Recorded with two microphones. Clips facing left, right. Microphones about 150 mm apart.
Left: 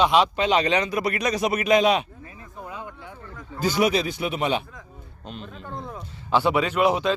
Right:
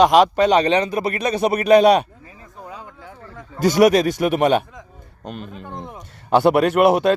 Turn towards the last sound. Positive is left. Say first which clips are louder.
# right 7 dB
turn(degrees=-65)  # may be behind; listen again after turning